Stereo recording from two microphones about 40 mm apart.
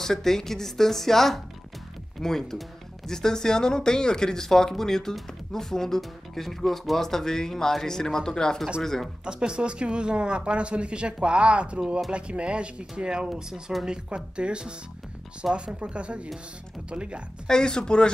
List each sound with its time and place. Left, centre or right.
0.0 s speech: centre
9.2 s speech: right
17.5 s speech: centre